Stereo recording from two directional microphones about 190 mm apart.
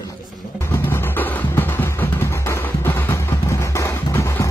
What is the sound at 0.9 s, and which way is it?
Music, 10° left (ahead or behind).